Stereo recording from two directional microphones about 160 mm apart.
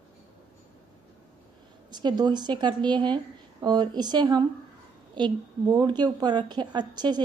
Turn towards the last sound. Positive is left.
turn(degrees=-25)  # may be behind; listen again after turning